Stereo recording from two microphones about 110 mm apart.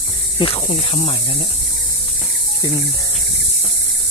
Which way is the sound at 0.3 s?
50° left (ahead or behind).